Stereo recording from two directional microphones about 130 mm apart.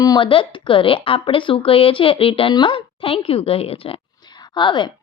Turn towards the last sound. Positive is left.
turn(degrees=35)  # may be behind; listen again after turning